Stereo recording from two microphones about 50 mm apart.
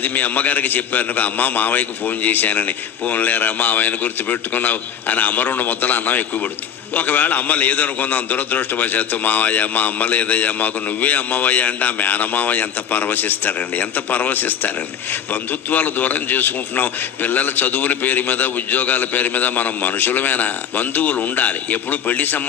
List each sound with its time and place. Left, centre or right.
0.0 s a man's voice: left
15.7 s a man's voice: left